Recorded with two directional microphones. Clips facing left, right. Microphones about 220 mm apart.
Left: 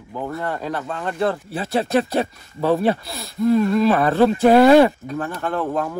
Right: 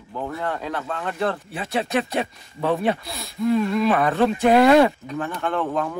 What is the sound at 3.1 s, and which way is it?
Speech, centre (ahead or behind).